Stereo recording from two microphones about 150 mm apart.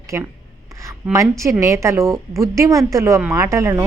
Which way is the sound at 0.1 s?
15° right (ahead or behind).